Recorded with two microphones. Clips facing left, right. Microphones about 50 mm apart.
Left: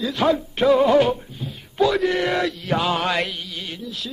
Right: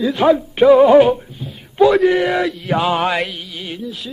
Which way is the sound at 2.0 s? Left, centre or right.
Centre.